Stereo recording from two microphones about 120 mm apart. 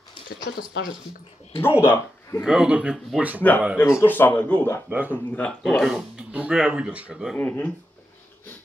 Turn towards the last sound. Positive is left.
turn(degrees=15)  # may be behind; listen again after turning